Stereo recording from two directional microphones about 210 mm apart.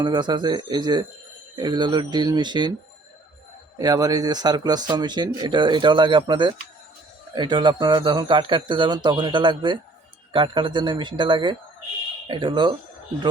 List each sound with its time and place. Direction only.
0.0 s speech: 20° right (ahead or behind)
3.8 s speech: 15° right (ahead or behind)